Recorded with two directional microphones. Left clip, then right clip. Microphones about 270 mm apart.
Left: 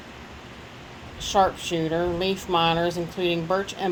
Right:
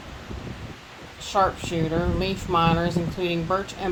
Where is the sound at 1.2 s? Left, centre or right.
Centre.